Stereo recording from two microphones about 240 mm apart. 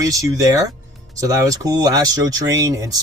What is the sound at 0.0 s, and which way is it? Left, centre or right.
Speech, centre.